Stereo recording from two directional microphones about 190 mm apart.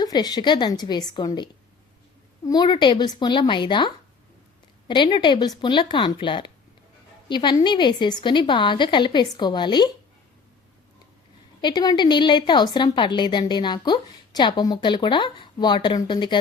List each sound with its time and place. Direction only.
0.0 s a woman's voice: 20° left (ahead or behind)
11.6 s a woman's voice: 20° left (ahead or behind)